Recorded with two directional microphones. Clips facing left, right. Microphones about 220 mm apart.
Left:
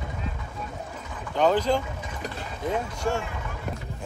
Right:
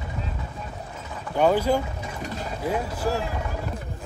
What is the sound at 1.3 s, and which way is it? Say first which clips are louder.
Speech: right 2 dB; 10° right (ahead or behind).